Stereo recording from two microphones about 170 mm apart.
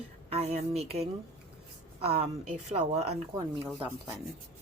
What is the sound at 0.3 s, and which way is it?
Speech, 35° right (ahead or behind).